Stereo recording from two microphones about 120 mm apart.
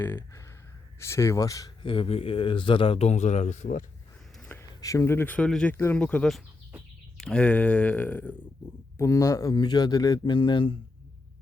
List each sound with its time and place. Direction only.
0.0 s speech: 20° left (ahead or behind)
1.8 s speech: 45° left (ahead or behind); by 3.8 s 85° left
4.4 s a sound: 15° left (ahead or behind)
4.8 s speech: 25° left (ahead or behind)
9.0 s speech: 25° left (ahead or behind); by 10.8 s 40° left (ahead or behind)